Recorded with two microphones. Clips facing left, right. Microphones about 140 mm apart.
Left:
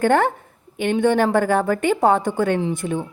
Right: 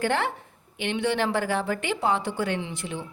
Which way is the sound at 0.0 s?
45° left (ahead or behind).